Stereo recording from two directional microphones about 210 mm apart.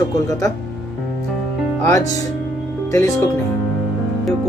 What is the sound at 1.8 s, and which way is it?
Speech, 15° left (ahead or behind).